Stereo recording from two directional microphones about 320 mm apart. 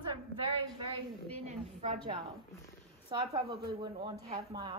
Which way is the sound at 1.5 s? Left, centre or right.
Right.